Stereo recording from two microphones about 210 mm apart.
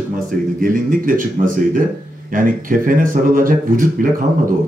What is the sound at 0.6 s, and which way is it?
A man's voice, 40° right (ahead or behind).